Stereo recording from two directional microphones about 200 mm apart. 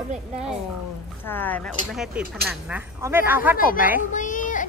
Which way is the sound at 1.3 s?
10° left (ahead or behind).